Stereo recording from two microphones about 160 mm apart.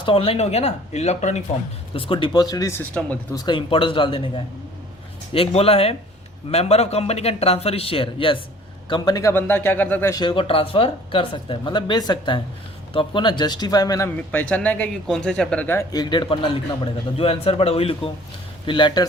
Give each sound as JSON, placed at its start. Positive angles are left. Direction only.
{"t": 0.0, "sound": "speech", "side_deg": 35}
{"t": 1.9, "sound": "speech", "side_deg": 35}
{"t": 3.3, "sound": "speech", "side_deg": 30}
{"t": 5.3, "sound": "speech", "side_deg": 35}
{"t": 9.3, "sound": "speech", "side_deg": 15}
{"t": 10.2, "sound": "speech", "side_deg": 30}
{"t": 14.2, "sound": "speech", "side_deg": 10}